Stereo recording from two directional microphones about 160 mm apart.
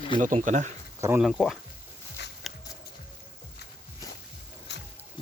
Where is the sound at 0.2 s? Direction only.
50° right (ahead or behind).